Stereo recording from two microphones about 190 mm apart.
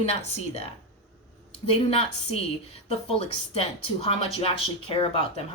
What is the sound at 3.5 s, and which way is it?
A woman's voice, 30° left (ahead or behind).